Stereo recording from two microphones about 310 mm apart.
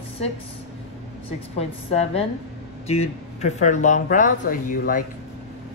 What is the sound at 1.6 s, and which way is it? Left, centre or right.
Speech, centre.